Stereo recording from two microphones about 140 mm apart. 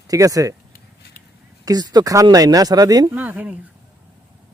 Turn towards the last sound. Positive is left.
turn(degrees=-10)  # may be behind; listen again after turning